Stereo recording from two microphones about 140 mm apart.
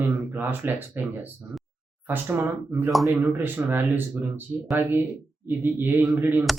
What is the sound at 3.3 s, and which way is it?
Speech, 15° right (ahead or behind).